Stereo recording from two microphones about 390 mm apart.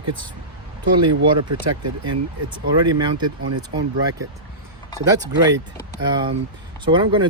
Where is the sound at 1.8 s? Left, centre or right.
Right.